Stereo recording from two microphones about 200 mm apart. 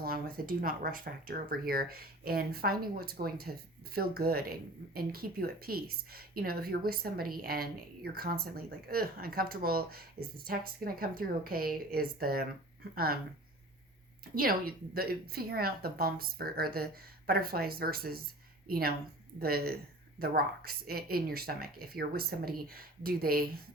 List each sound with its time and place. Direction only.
0.0 s a woman's voice: 45° right (ahead or behind)
14.3 s a woman's voice: 50° right (ahead or behind)